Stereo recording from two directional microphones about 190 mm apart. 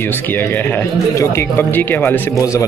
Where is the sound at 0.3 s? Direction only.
10° left (ahead or behind).